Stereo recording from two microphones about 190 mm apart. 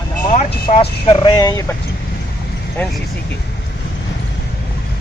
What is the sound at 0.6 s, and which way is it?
Speech, 30° left (ahead or behind).